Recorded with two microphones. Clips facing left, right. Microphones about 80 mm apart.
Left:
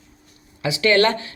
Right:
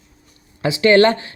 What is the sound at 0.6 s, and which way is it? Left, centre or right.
Speech, right.